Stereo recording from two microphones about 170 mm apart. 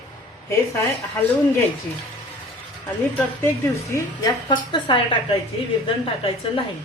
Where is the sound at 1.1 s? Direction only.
10° left (ahead or behind).